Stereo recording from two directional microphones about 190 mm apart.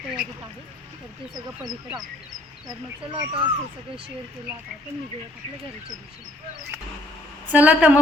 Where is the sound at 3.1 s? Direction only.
25° right (ahead or behind).